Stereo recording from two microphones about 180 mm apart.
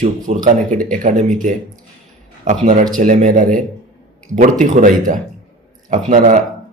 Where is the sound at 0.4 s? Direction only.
45° right (ahead or behind).